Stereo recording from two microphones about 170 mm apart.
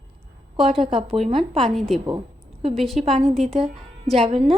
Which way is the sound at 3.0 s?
35° right (ahead or behind).